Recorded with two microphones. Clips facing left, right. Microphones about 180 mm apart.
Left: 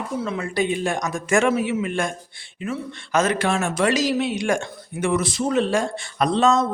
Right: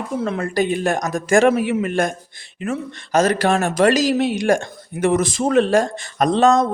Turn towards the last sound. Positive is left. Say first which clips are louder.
# right 4 dB
turn(degrees=-50)  # may be behind; listen again after turning